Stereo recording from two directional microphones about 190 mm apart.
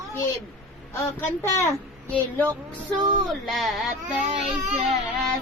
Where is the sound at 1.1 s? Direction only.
15° left (ahead or behind).